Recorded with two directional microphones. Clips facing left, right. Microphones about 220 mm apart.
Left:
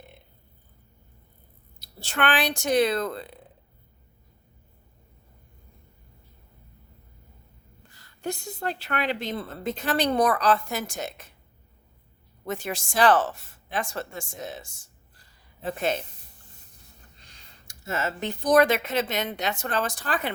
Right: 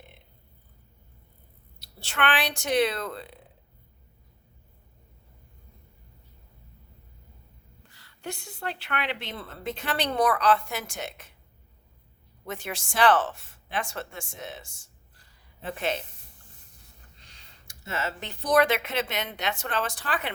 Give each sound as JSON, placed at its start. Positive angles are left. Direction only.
{"t": 1.8, "sound": "a woman's voice", "side_deg": 40}
{"t": 7.9, "sound": "a woman's voice", "side_deg": 40}
{"t": 12.5, "sound": "a woman's voice", "side_deg": 40}
{"t": 17.2, "sound": "speech", "side_deg": 45}